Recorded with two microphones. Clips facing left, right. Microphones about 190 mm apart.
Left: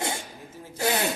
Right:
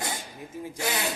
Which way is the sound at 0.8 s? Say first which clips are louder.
Left 5 dB; 40° left (ahead or behind).